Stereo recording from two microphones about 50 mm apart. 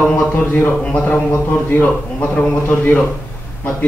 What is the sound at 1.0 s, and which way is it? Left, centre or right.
Speech, left.